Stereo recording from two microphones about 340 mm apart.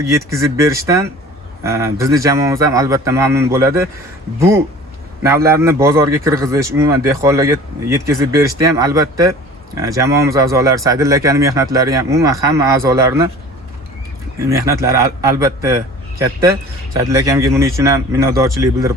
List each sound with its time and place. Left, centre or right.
0.2 s a man's voice: centre
14.4 s a man's voice: centre